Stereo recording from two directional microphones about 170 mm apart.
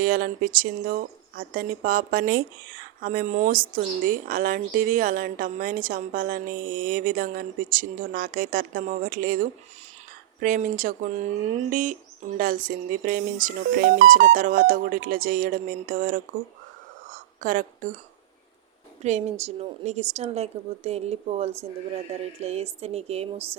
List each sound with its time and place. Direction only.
0.0 s a woman's voice: 55° right (ahead or behind)
17.1 s a sound: 50° right (ahead or behind)
19.0 s a woman's voice: 40° right (ahead or behind)